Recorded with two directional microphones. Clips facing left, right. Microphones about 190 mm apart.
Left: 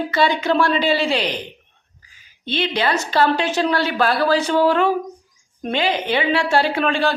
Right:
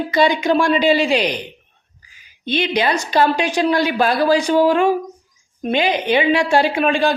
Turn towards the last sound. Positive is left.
turn(degrees=-15)  # may be behind; listen again after turning